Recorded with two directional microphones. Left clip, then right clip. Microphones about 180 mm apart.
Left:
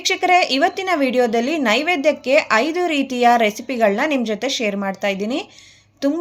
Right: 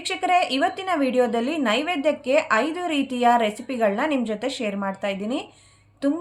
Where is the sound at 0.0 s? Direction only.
40° left (ahead or behind).